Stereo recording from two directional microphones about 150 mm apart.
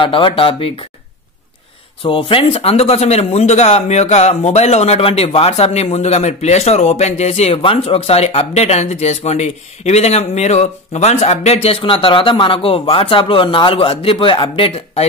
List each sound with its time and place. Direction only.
0.0 s speech: 35° left (ahead or behind)
2.0 s speech: 35° left (ahead or behind)